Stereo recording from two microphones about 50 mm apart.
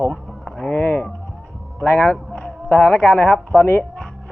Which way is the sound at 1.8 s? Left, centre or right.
Left.